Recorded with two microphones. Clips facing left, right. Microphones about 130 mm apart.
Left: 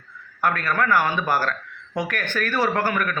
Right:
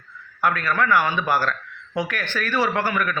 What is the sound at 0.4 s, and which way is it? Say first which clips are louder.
Speech: right 1 dB; 45° left (ahead or behind).